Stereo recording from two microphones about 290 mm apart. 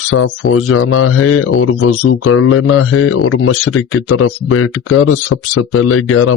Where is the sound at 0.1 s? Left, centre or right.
Left.